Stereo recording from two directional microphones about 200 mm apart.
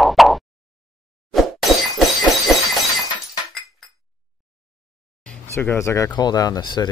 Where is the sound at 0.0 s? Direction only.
Centre (ahead or behind).